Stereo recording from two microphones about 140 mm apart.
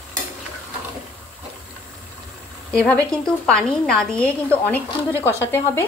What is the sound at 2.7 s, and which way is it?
A woman's voice, 5° left (ahead or behind).